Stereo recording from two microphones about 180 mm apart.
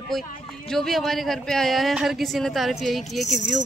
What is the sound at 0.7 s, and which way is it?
Speech, centre (ahead or behind).